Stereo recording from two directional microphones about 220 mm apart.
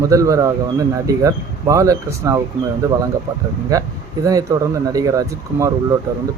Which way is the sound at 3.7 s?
15° right (ahead or behind).